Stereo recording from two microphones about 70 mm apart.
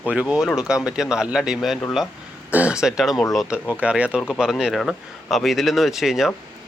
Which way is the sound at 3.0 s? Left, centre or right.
Centre.